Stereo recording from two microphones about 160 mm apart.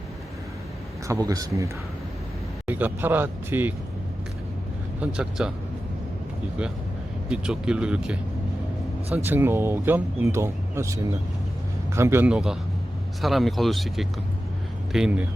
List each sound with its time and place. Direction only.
1.0 s speech: 20° right (ahead or behind)
4.9 s speech: 5° right (ahead or behind)
7.3 s speech: 5° right (ahead or behind)